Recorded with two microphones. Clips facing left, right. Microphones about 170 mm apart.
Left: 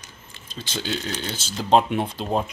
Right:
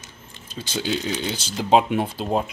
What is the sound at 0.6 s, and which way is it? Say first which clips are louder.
Speech: right 3 dB; 10° right (ahead or behind).